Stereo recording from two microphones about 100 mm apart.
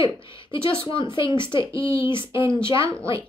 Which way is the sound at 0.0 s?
60° left (ahead or behind).